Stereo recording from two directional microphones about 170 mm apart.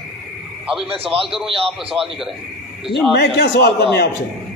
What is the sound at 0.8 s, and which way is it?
Speech, 35° right (ahead or behind).